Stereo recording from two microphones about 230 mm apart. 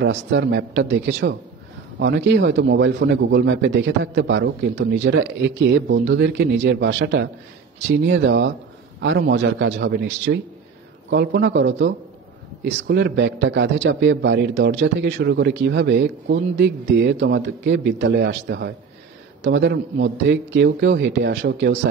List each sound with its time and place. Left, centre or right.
0.0 s a man's voice: right